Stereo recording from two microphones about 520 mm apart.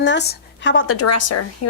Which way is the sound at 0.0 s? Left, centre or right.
Centre.